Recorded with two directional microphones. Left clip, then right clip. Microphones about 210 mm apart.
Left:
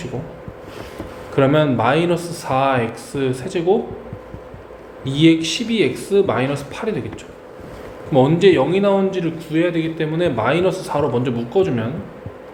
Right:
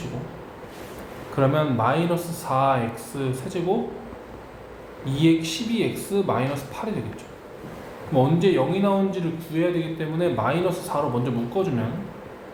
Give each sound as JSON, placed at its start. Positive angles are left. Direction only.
{"t": 1.4, "sound": "a man's voice", "side_deg": 35}
{"t": 5.0, "sound": "a man's voice", "side_deg": 35}
{"t": 8.1, "sound": "a man's voice", "side_deg": 35}